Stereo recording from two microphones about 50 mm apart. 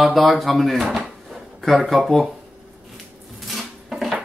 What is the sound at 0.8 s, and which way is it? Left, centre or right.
Dishes, centre.